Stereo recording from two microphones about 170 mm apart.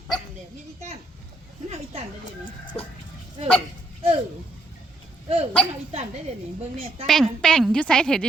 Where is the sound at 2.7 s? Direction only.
5° left (ahead or behind).